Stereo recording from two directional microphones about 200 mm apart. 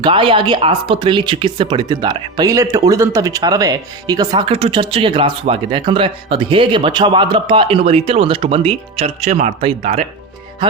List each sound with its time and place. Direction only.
0.0 s speech: 25° right (ahead or behind)